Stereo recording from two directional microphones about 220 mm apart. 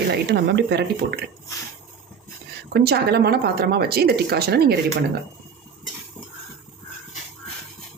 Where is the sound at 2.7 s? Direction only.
45° right (ahead or behind).